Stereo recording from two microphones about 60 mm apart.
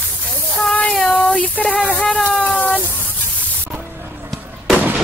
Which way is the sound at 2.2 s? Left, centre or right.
Centre.